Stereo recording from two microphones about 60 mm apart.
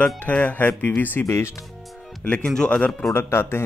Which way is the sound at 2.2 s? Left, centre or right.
Left.